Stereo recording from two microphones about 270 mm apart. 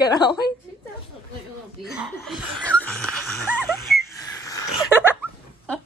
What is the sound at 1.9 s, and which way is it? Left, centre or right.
Chuckle, centre.